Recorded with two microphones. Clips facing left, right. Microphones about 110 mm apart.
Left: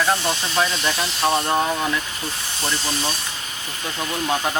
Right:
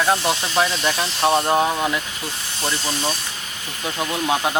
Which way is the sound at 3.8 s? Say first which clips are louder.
Right 2 dB; 15° right (ahead or behind).